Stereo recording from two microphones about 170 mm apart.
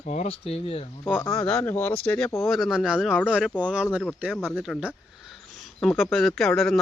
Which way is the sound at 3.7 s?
5° right (ahead or behind).